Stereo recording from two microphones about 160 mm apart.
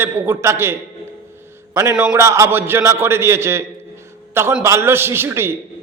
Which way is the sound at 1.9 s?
5° right (ahead or behind).